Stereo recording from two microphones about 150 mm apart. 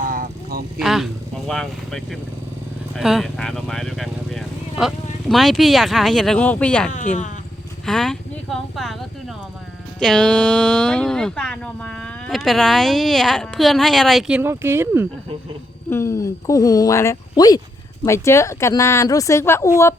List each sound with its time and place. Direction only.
0.0 s a sound: 65° right (ahead or behind)
0.8 s speech: centre (ahead or behind)
6.9 s speech: 55° left (ahead or behind)
7.9 s speech: 5° left (ahead or behind); by 15.0 s 15° right (ahead or behind)
15.9 s a woman's voice: 20° left (ahead or behind)